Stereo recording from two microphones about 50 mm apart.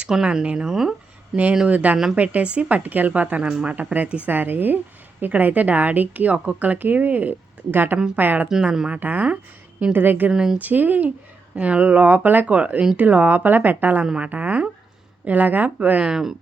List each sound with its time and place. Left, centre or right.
0.1 s speech: centre
1.6 s a woman's voice: right
3.5 s speech: centre
4.3 s a woman's voice: right
10.2 s speech: centre
10.6 s a woman's voice: right
12.5 s a woman's voice: right
14.0 s speech: centre
14.3 s a woman's voice: right
16.0 s speech: centre